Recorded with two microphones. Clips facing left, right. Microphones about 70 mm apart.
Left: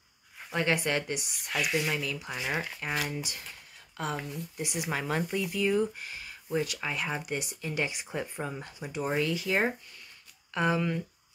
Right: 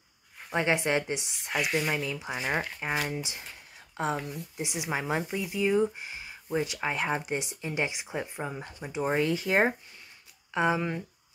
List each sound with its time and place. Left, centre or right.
0.5 s speech: right
2.5 s speech: centre
3.1 s speech: right
9.1 s speech: right
10.5 s speech: right